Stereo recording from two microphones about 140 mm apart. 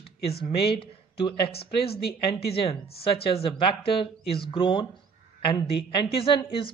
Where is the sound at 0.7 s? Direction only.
40° left (ahead or behind).